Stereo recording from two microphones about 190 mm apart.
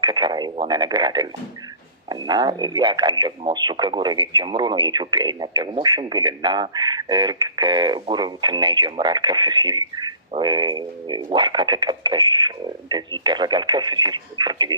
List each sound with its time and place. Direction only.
0.0 s speech: 20° right (ahead or behind)